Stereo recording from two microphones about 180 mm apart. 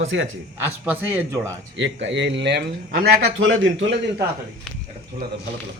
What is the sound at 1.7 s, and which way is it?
Speech, 90° right.